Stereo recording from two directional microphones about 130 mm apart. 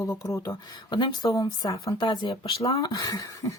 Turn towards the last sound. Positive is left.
turn(degrees=25)  # may be behind; listen again after turning